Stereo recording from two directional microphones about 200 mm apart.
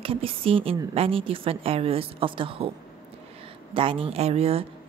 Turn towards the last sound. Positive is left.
turn(degrees=-30)  # may be behind; listen again after turning